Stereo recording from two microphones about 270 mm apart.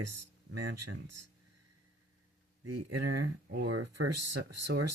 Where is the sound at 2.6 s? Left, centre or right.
Right.